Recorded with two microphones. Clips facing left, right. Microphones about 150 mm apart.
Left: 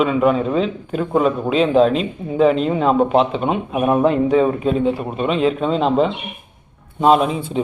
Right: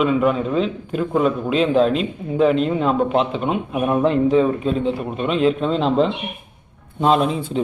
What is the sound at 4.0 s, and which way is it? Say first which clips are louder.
Speech: right 1 dB; 5° left (ahead or behind).